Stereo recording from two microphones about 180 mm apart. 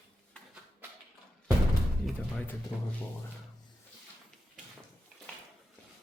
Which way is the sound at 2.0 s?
5° left (ahead or behind).